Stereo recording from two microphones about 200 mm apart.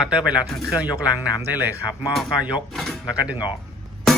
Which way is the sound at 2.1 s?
Centre (ahead or behind).